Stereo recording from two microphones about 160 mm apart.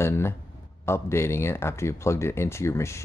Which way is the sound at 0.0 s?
15° left (ahead or behind).